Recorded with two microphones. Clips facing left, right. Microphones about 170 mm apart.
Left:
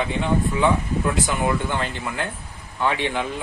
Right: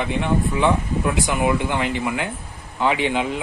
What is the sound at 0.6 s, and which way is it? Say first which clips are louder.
A man's voice: right 1 dB; 15° right (ahead or behind).